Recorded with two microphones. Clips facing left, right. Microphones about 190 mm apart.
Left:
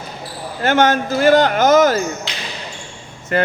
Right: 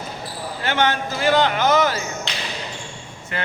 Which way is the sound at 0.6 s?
45° left (ahead or behind).